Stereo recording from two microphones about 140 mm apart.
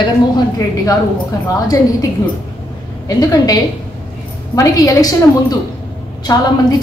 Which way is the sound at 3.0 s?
25° left (ahead or behind).